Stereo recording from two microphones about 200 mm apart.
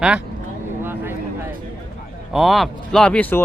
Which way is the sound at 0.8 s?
10° right (ahead or behind).